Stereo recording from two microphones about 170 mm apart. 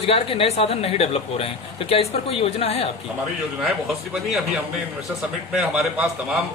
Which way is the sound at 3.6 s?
Centre (ahead or behind).